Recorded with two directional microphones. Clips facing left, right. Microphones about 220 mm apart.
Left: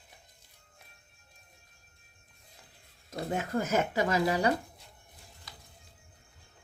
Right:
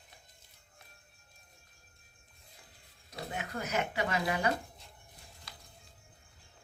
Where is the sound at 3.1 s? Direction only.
45° left (ahead or behind).